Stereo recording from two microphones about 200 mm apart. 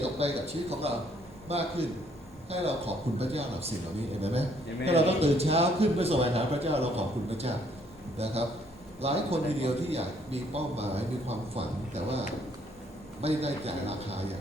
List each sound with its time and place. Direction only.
0.0 s a man's voice: 30° right (ahead or behind)
13.2 s a man's voice: 30° right (ahead or behind)